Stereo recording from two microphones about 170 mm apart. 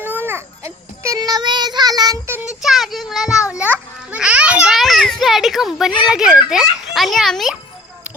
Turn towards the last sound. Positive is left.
turn(degrees=0)  # may be behind; listen again after turning